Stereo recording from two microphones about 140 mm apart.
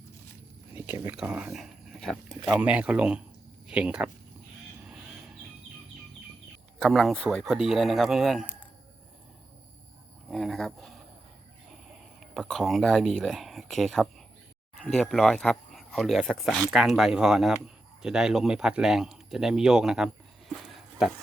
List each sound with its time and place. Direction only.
0.8 s a sound: 15° right (ahead or behind)
1.1 s speech: 5° right (ahead or behind)
2.6 s speech: 10° right (ahead or behind)
6.7 s speech: centre (ahead or behind)
10.3 s speech: centre (ahead or behind)
12.2 s speech: centre (ahead or behind)
20.7 s pig: centre (ahead or behind)